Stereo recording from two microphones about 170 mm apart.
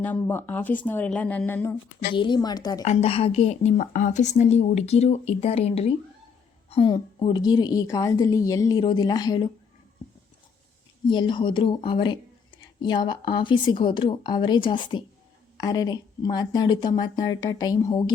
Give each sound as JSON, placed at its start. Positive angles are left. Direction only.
{"t": 0.0, "sound": "speech", "side_deg": 10}
{"t": 2.1, "sound": "a woman's voice", "side_deg": 25}
{"t": 2.8, "sound": "a woman's voice", "side_deg": 40}
{"t": 11.1, "sound": "a woman's voice", "side_deg": 25}